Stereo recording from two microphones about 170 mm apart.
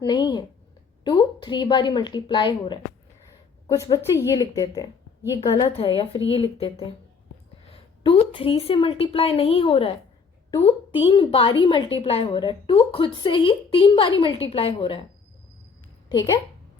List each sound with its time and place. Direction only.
0.1 s a woman's voice: 25° left (ahead or behind)
16.0 s speech: 25° left (ahead or behind)